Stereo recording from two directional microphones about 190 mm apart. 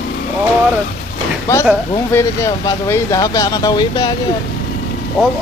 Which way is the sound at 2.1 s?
15° left (ahead or behind).